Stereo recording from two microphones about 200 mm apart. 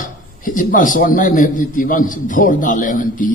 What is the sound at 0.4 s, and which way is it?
A man's voice, 45° left (ahead or behind).